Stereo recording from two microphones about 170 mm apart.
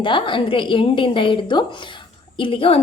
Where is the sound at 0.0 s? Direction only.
30° left (ahead or behind).